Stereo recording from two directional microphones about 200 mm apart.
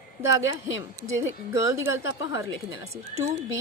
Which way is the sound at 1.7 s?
15° right (ahead or behind).